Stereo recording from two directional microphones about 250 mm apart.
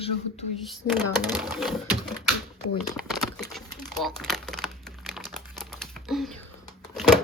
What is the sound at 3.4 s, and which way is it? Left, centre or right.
Crumpling, centre.